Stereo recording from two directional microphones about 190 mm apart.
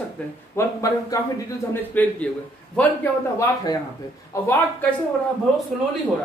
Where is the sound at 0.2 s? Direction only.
5° left (ahead or behind).